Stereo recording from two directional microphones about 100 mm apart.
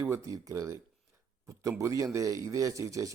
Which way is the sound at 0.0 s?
30° right (ahead or behind).